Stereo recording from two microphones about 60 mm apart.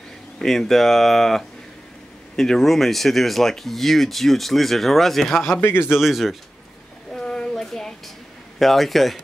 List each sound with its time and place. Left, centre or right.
0.4 s speech: centre
5.6 s a man's voice: left
5.9 s speech: centre
7.2 s a sound: centre
8.5 s speech: centre